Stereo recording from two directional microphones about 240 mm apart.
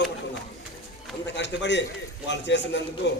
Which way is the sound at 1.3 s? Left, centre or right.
Left.